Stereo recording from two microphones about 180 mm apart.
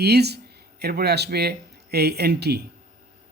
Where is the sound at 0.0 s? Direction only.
65° right (ahead or behind).